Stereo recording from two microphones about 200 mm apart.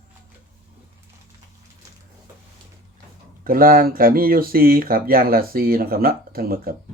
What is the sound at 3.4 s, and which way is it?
Speech, 45° right (ahead or behind).